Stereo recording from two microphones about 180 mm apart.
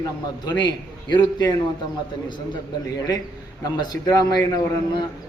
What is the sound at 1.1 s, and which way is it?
Speech, 25° left (ahead or behind).